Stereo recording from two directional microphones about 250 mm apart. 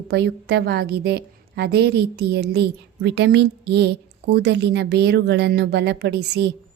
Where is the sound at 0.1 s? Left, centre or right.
Right.